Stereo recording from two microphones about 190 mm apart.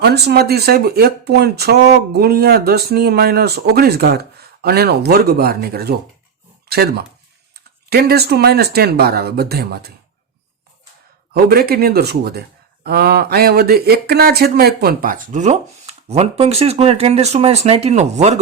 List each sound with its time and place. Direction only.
0.0 s speech: 60° right (ahead or behind)
11.4 s speech: 55° right (ahead or behind); by 18.3 s 35° right (ahead or behind)